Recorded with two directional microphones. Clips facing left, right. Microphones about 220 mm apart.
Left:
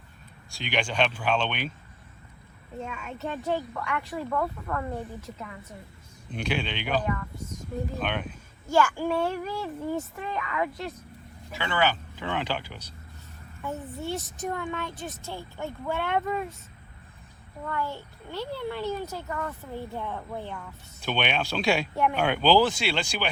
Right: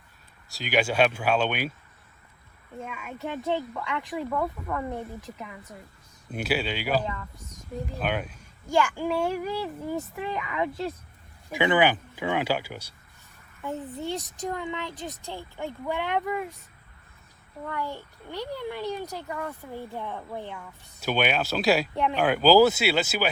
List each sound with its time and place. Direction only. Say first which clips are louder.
0.5 s a child's voice: right 4 dB; 5° right (ahead or behind)
2.8 s a child's voice: even; 5° right (ahead or behind)
8.7 s a child's voice: left 1 dB; 15° right (ahead or behind)
9.0 s speech: even; centre (ahead or behind)
9.3 s a child's voice: right 2 dB; 10° right (ahead or behind)
17.7 s a child's voice: left 1 dB; 15° right (ahead or behind)